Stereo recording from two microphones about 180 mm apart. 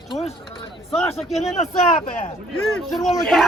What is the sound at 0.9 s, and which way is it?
Speech, 35° left (ahead or behind).